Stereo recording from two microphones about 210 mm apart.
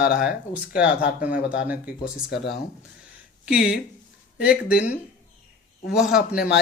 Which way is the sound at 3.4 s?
5° right (ahead or behind).